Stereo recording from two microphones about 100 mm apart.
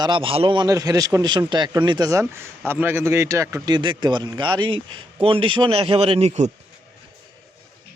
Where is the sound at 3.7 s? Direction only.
50° right (ahead or behind).